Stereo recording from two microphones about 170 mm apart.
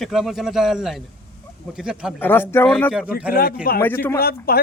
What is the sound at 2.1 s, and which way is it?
Speech, 10° left (ahead or behind).